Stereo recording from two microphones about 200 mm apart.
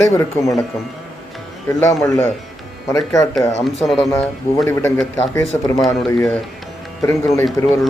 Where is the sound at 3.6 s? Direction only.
Centre (ahead or behind).